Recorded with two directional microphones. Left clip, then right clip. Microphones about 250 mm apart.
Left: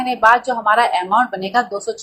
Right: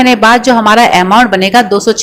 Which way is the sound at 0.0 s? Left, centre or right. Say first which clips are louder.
Right 7 dB; right.